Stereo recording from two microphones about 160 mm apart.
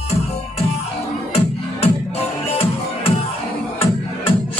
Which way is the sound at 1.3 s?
40° left (ahead or behind).